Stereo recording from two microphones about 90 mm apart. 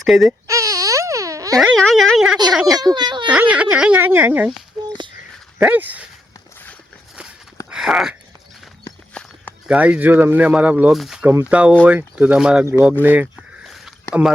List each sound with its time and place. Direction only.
0.0 s speech: centre (ahead or behind)
0.3 s baby cry: 35° right (ahead or behind)
1.5 s speech: 5° left (ahead or behind)
2.7 s speech: 50° right (ahead or behind)
3.5 s speech: 15° right (ahead or behind)
3.9 s speech: 25° right (ahead or behind)
5.5 s speech: 15° right (ahead or behind)
7.7 s a sound: 10° right (ahead or behind)
9.1 s walk: 20° left (ahead or behind)
9.6 s speech: 15° right (ahead or behind)
10.9 s speech: centre (ahead or behind)
11.4 s speech: 15° right (ahead or behind)
13.3 s a sound: 5° right (ahead or behind)
14.1 s speech: 10° right (ahead or behind)